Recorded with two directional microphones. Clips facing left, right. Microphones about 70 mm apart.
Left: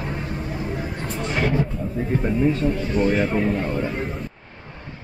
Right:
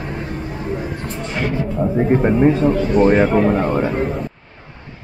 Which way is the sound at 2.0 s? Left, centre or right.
Right.